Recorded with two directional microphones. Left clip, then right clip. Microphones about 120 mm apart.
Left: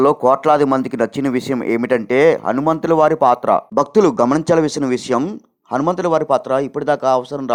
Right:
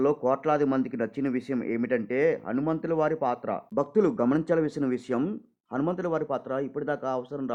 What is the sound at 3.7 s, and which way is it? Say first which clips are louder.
A man's voice: left 6 dB; 30° left (ahead or behind).